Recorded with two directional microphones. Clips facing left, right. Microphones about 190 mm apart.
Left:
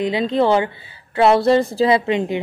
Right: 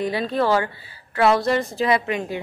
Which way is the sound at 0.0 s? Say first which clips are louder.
Left 4 dB; 20° left (ahead or behind).